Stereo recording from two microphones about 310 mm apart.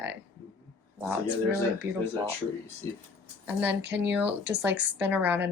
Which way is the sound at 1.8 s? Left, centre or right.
Centre.